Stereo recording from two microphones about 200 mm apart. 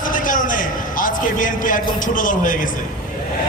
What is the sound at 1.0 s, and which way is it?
A man's voice, 40° left (ahead or behind).